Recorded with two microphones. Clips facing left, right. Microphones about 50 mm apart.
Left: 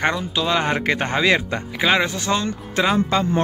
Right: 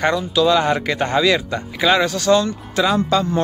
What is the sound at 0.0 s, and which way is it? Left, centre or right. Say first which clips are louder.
Speech: right 5 dB; left.